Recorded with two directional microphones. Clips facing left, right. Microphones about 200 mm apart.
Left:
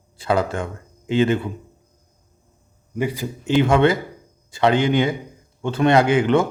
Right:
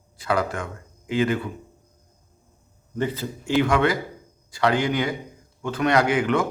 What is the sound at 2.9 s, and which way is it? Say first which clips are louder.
A man's voice: left 2 dB; 10° left (ahead or behind).